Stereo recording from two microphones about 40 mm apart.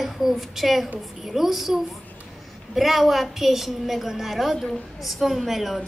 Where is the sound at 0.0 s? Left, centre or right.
Centre.